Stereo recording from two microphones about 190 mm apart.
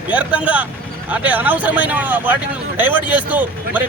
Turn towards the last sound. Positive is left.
turn(degrees=-10)  # may be behind; listen again after turning